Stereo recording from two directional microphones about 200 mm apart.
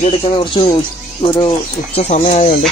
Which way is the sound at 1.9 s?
35° left (ahead or behind).